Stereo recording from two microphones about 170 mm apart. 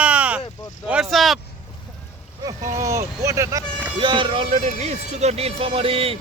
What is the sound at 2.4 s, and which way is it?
Speech, 15° right (ahead or behind).